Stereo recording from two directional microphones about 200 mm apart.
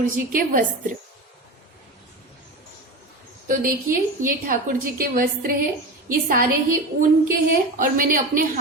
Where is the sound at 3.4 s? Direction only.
45° right (ahead or behind).